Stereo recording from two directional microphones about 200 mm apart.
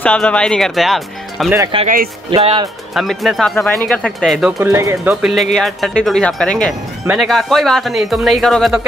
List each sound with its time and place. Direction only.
0.0 s speech: 5° left (ahead or behind)
1.7 s speech: 25° right (ahead or behind)
2.9 s speech: centre (ahead or behind)
4.6 s speech: 15° right (ahead or behind)